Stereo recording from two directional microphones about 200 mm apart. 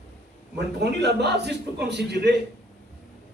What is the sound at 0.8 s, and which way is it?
A man's voice, 55° right (ahead or behind).